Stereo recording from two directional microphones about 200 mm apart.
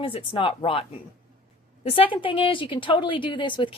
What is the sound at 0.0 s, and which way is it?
A woman's voice, 25° left (ahead or behind).